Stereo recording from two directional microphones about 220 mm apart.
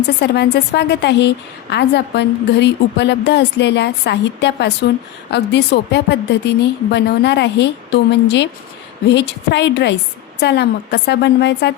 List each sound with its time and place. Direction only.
0.2 s a woman's voice: 50° left (ahead or behind)